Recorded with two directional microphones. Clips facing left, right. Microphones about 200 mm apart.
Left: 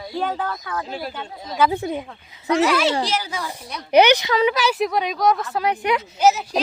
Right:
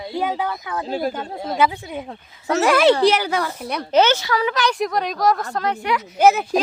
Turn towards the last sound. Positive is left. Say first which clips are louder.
# right 3 dB
turn(degrees=-55)  # may be behind; listen again after turning